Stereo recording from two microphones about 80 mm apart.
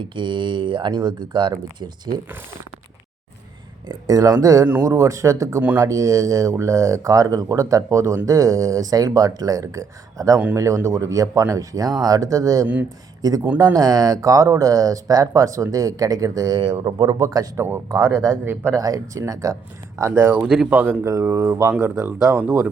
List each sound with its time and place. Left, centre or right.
0.0 s speech: right
0.9 s speech: right
4.0 s speech: right
13.7 s speech: right
20.0 s speech: right
20.4 s speech: centre
20.7 s speech: right
21.1 s speech: right